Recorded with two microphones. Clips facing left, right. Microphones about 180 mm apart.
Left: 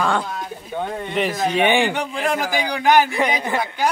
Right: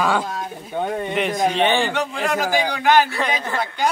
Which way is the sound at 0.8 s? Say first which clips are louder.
Right 3 dB; 15° right (ahead or behind).